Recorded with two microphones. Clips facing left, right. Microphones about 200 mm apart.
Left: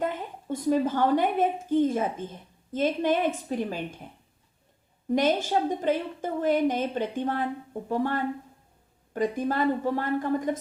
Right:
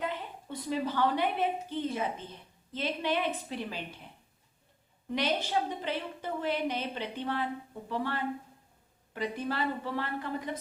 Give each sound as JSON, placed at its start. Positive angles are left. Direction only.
{"t": 0.0, "sound": "a woman's voice", "side_deg": 45}